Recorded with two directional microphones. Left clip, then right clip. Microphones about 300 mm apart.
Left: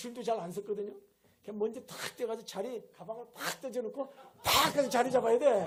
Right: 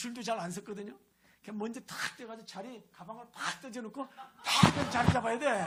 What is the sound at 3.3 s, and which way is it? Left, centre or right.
Speech, left.